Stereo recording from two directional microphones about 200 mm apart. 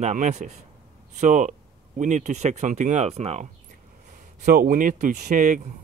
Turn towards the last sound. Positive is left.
turn(degrees=-35)  # may be behind; listen again after turning